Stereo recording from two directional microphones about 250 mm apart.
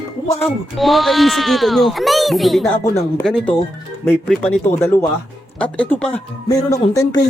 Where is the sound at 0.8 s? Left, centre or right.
Centre.